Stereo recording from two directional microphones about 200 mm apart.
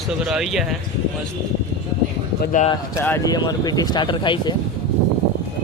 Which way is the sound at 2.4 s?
40° left (ahead or behind).